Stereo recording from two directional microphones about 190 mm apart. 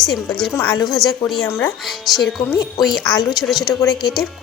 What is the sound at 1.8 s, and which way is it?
Speech, centre (ahead or behind).